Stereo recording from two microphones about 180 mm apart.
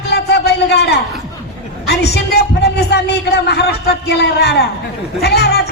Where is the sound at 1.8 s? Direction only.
65° left (ahead or behind).